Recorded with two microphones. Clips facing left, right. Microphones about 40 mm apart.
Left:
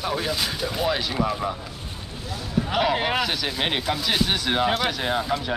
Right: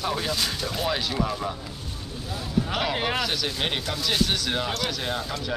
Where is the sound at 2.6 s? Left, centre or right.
Centre.